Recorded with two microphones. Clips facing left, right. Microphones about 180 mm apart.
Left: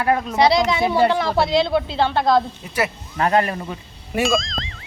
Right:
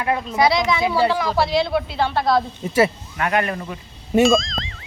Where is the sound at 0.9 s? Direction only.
50° left (ahead or behind).